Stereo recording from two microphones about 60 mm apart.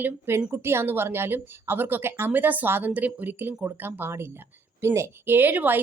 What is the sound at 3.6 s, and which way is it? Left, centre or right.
A woman's voice, right.